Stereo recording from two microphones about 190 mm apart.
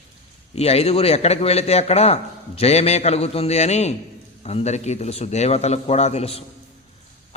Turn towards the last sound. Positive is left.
turn(degrees=30)  # may be behind; listen again after turning